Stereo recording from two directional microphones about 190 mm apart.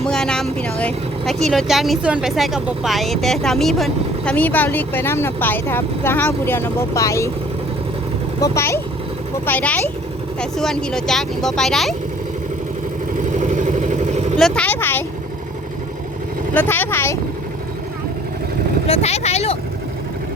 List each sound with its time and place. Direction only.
0.0 s speech: 5° left (ahead or behind)
8.4 s speech: 15° left (ahead or behind)
13.3 s vehicle: 40° right (ahead or behind)
14.3 s speech: 5° left (ahead or behind)
16.6 s speech: 10° left (ahead or behind)
18.9 s speech: 35° left (ahead or behind)